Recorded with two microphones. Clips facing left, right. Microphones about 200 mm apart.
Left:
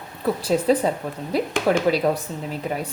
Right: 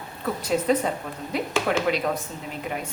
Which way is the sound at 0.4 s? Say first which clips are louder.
Left 3 dB; 30° left (ahead or behind).